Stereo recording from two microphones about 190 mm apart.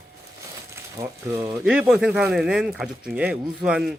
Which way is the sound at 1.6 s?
5° right (ahead or behind).